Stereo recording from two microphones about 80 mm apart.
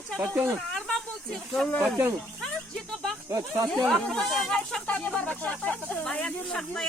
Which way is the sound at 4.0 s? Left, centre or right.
Centre.